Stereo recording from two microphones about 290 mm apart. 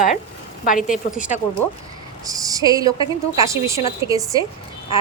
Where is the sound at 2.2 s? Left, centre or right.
Centre.